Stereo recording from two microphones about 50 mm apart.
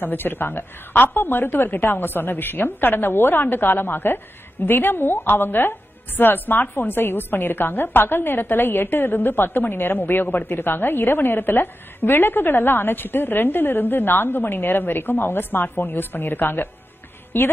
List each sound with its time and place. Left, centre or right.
0.0 s a woman's voice: left